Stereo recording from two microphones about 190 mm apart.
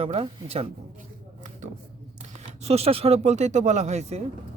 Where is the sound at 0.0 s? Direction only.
30° right (ahead or behind).